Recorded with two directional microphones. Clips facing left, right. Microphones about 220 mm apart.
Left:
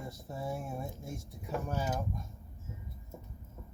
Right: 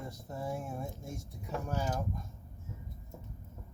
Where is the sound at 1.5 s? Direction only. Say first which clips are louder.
Left 1 dB; 15° left (ahead or behind).